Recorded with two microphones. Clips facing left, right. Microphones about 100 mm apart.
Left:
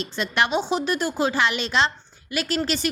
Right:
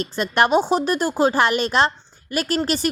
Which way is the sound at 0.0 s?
45° right (ahead or behind).